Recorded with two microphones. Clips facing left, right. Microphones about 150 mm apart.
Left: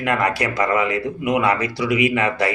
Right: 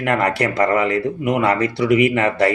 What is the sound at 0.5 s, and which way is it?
Speech, 35° right (ahead or behind).